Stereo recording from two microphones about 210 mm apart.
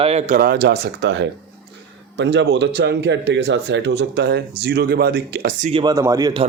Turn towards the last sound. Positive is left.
turn(degrees=-20)  # may be behind; listen again after turning